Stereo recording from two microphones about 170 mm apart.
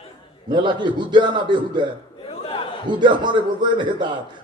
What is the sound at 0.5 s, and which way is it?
A man's voice, 25° right (ahead or behind).